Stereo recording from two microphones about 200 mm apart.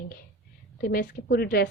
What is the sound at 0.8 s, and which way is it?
Speech, 45° left (ahead or behind).